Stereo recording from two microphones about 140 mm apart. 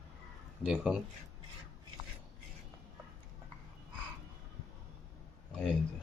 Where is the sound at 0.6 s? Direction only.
5° right (ahead or behind).